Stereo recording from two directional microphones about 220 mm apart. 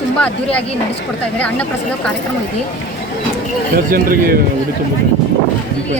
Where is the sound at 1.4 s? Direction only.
5° left (ahead or behind).